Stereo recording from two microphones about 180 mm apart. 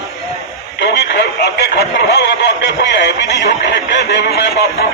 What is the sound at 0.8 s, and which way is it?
Radio, 70° left (ahead or behind).